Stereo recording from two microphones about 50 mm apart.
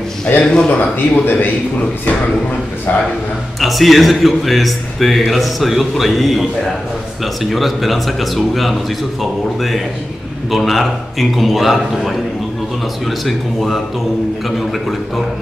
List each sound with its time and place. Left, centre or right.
0.4 s a man's voice: centre
0.7 s a man's voice: left
3.5 s a man's voice: centre
7.4 s a man's voice: centre